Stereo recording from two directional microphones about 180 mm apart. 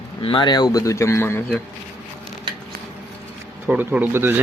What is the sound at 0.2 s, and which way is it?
Speech, 30° left (ahead or behind).